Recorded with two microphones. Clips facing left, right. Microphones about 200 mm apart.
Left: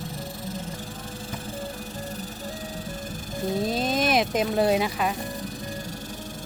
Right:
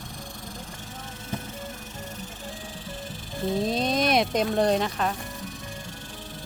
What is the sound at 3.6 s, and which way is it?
Speech, centre (ahead or behind).